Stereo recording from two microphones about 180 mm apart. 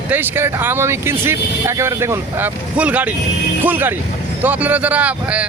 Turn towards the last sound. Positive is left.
turn(degrees=-5)  # may be behind; listen again after turning